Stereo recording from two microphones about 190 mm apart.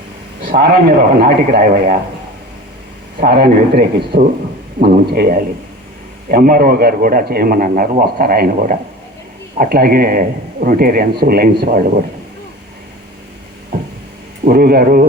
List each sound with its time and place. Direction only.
0.5 s a man's voice: 55° right (ahead or behind)
3.2 s a man's voice: 55° right (ahead or behind)
14.4 s a man's voice: 50° right (ahead or behind)